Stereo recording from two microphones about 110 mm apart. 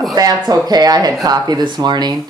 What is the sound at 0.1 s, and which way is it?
Speech, 35° right (ahead or behind).